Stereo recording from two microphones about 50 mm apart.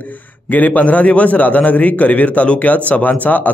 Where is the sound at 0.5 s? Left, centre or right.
Left.